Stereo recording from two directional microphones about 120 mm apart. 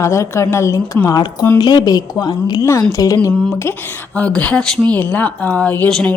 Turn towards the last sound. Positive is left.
turn(degrees=15)  # may be behind; listen again after turning